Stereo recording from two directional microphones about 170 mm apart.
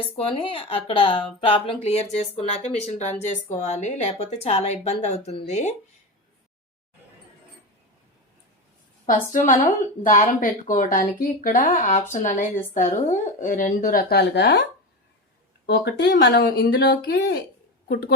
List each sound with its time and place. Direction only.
0.3 s a woman's voice: 35° left (ahead or behind)
9.3 s a woman's voice: 50° left (ahead or behind)
14.1 s speech: 80° left
15.6 s a woman's voice: 75° left (ahead or behind)